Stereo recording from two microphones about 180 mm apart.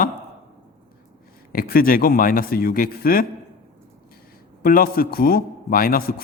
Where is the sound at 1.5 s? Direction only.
55° left (ahead or behind).